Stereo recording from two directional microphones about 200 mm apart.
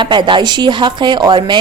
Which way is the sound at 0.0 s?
25° right (ahead or behind).